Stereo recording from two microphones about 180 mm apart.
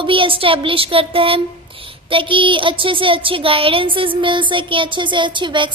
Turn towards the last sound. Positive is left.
turn(degrees=-25)  # may be behind; listen again after turning